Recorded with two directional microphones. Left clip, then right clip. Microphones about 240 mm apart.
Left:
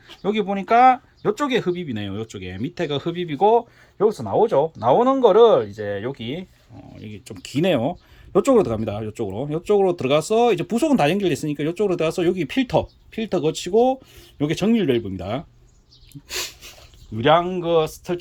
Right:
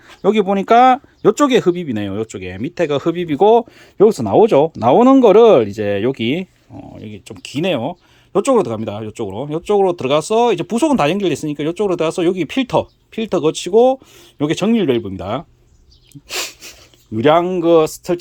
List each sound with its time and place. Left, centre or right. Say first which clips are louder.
0.2 s speech: right 8 dB; right
3.9 s speech: right 8 dB; right
6.9 s speech: right 4 dB; centre
7.3 s speech: right 2 dB; centre
16.3 s a sound: right 5 dB; centre
17.2 s speech: right 4 dB; right